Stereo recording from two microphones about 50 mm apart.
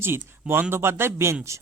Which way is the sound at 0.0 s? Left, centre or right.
Right.